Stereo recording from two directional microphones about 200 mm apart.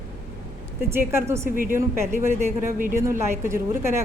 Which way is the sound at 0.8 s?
10° right (ahead or behind).